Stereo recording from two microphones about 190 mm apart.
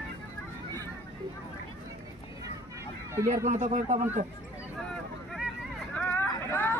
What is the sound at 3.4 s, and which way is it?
Speech, 40° right (ahead or behind).